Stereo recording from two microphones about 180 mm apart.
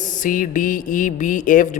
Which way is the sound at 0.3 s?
50° left (ahead or behind).